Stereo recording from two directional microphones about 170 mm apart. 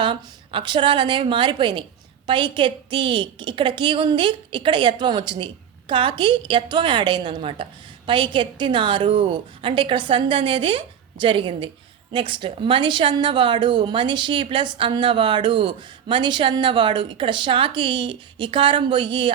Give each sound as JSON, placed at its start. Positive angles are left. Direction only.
{"t": 0.0, "sound": "a woman's voice", "side_deg": -30}